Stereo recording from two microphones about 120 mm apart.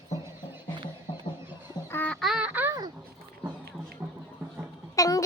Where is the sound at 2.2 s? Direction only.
5° right (ahead or behind).